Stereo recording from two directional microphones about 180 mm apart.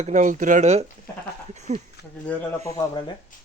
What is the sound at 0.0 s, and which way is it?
Speech, 40° right (ahead or behind).